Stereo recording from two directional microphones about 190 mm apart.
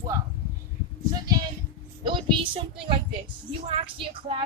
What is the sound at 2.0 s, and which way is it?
Speech, 25° right (ahead or behind).